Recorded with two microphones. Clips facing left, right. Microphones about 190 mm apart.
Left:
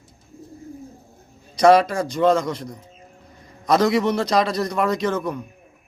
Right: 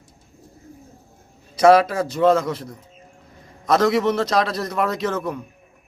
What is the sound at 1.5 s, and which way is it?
A man's voice, 5° right (ahead or behind).